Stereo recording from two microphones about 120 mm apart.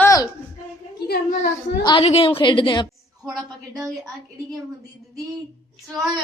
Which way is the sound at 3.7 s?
Centre (ahead or behind).